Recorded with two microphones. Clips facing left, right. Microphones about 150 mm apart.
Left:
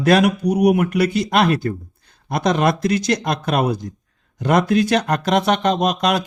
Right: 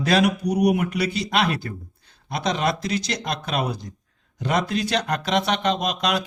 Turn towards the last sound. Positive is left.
turn(degrees=45)  # may be behind; listen again after turning